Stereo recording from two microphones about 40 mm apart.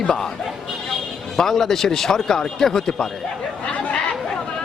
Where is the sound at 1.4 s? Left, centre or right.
Centre.